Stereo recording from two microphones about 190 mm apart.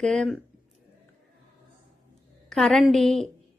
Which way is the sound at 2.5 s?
Centre (ahead or behind).